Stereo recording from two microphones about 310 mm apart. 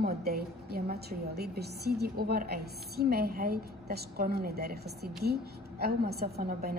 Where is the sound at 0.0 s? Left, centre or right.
Right.